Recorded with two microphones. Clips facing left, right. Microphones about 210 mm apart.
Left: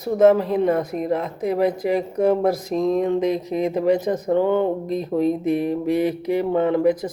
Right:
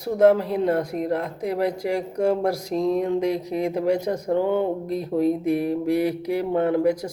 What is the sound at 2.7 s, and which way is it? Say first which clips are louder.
Speech: even; 15° left (ahead or behind).